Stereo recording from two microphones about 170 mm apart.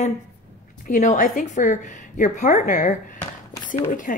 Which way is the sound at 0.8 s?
50° left (ahead or behind).